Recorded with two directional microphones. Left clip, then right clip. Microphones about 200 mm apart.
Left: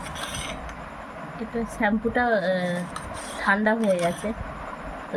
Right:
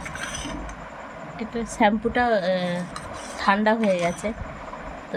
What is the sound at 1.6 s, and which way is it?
Speech, 30° right (ahead or behind).